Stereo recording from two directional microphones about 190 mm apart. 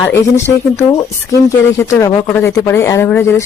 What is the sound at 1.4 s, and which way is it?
Speech, 15° left (ahead or behind).